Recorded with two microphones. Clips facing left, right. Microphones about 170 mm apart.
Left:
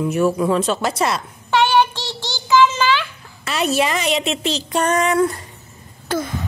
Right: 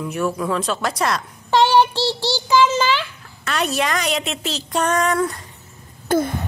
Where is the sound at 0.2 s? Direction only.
25° left (ahead or behind).